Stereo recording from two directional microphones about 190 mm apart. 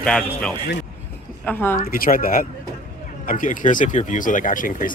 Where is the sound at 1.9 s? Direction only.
50° left (ahead or behind).